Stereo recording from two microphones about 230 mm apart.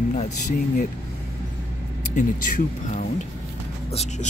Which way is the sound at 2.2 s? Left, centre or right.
Left.